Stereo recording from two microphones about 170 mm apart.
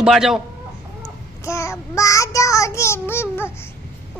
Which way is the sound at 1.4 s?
15° left (ahead or behind).